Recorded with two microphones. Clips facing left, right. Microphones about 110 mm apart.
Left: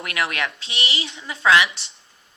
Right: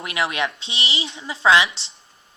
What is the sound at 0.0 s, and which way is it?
Speech, 20° right (ahead or behind).